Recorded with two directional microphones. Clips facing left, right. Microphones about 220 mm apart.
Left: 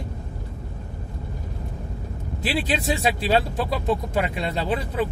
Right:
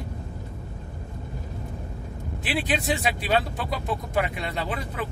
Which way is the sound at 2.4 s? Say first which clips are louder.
Left 2 dB; 30° left (ahead or behind).